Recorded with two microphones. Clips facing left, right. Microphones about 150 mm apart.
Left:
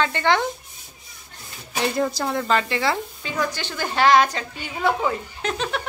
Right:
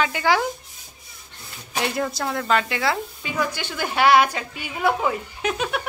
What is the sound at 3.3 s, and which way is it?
A woman's voice, 10° right (ahead or behind).